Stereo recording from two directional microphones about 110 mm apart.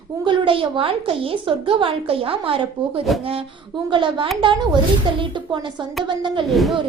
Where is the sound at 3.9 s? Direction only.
50° right (ahead or behind).